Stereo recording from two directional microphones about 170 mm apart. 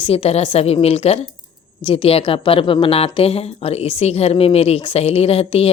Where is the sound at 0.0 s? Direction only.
35° left (ahead or behind).